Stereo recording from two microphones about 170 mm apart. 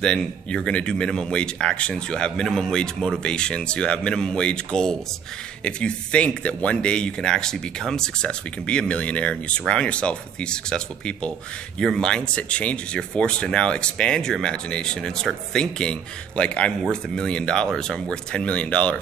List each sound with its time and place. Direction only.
0.0 s speech: 5° left (ahead or behind)